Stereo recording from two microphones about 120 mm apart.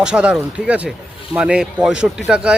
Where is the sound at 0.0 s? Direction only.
10° right (ahead or behind).